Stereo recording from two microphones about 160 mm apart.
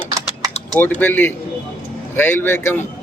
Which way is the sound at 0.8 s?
10° left (ahead or behind).